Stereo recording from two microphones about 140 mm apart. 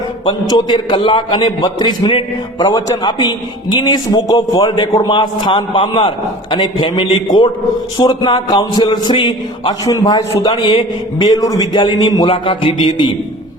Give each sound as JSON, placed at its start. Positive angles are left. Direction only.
{"t": 0.3, "sound": "a man's voice", "side_deg": 30}
{"t": 10.5, "sound": "a man's voice", "side_deg": 40}